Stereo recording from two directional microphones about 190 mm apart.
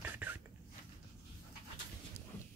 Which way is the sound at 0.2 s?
10° right (ahead or behind).